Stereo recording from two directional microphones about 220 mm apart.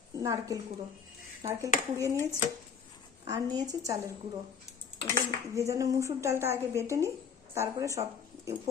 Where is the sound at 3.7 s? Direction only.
15° right (ahead or behind).